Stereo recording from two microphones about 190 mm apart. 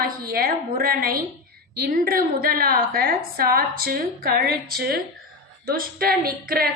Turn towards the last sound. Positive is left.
turn(degrees=-50)  # may be behind; listen again after turning